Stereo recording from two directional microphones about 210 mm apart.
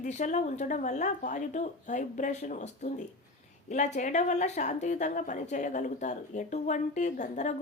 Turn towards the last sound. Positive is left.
turn(degrees=35)  # may be behind; listen again after turning